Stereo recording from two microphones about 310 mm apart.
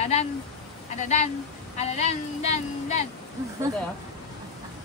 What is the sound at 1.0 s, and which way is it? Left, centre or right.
Speech, left.